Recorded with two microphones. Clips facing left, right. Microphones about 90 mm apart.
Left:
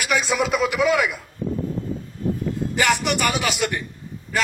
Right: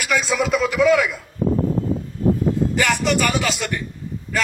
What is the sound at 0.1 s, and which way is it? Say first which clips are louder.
Speech: right 2 dB; 20° left (ahead or behind).